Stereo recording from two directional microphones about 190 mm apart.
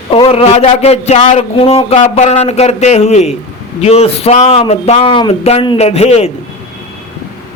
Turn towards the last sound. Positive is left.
turn(degrees=35)  # may be behind; listen again after turning